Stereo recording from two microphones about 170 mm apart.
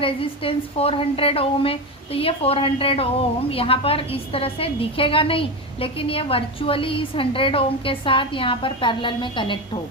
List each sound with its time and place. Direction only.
0.0 s a woman's voice: 30° left (ahead or behind)